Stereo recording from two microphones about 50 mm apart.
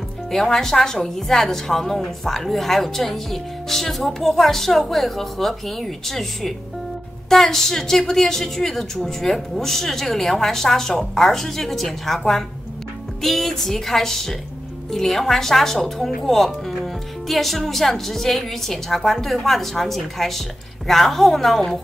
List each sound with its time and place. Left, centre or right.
0.3 s a woman's voice: centre